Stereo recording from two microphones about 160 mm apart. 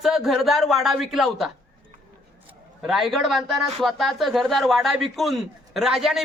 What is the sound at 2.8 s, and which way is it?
Speech, centre (ahead or behind).